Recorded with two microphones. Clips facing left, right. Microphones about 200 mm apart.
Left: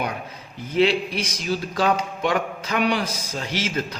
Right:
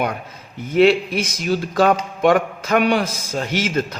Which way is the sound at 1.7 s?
50° right (ahead or behind).